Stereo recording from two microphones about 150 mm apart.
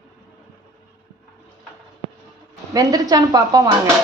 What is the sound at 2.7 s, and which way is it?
Speech, 25° right (ahead or behind).